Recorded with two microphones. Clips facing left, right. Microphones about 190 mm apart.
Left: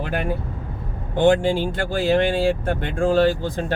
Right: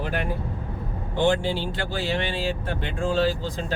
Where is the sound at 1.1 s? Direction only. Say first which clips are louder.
Left 6 dB; 50° left (ahead or behind).